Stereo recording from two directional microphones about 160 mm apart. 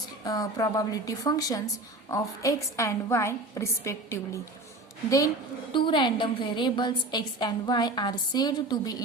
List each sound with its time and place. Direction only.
0.3 s a woman's voice: 20° left (ahead or behind)